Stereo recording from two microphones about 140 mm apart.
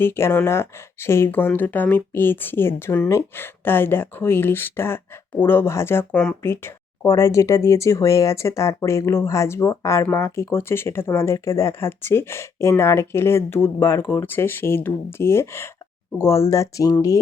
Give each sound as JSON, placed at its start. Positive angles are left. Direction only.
{"t": 0.0, "sound": "speech", "side_deg": 15}